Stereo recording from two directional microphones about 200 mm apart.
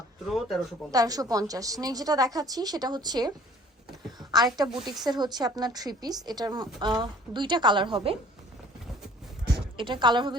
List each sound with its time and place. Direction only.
0.3 s speech: centre (ahead or behind)
0.9 s a woman's voice: 20° right (ahead or behind)
4.2 s a sound: 20° right (ahead or behind)
4.5 s a woman's voice: 20° right (ahead or behind)
9.7 s a woman's voice: 25° right (ahead or behind)